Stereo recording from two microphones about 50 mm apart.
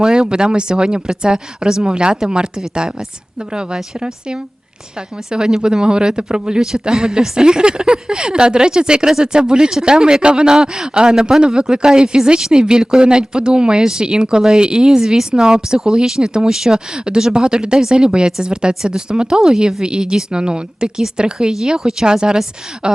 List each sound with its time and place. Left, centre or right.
0.0 s speech: centre
5.3 s speech: centre